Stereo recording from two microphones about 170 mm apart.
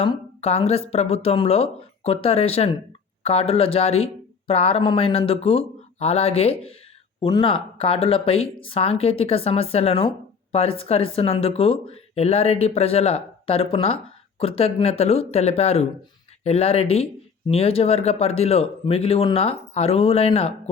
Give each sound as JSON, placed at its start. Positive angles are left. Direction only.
{"t": 0.0, "sound": "speech", "side_deg": 35}